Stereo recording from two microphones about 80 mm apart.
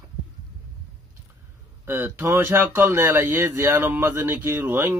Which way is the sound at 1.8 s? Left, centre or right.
Right.